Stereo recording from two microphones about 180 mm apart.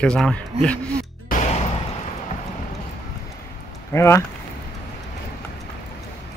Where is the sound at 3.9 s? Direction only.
15° left (ahead or behind).